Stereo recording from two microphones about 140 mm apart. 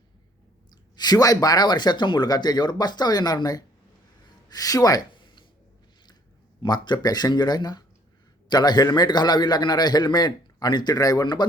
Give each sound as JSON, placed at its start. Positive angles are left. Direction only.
{"t": 0.9, "sound": "speech", "side_deg": 30}
{"t": 4.4, "sound": "a sound", "side_deg": 25}
{"t": 6.6, "sound": "a man's voice", "side_deg": 30}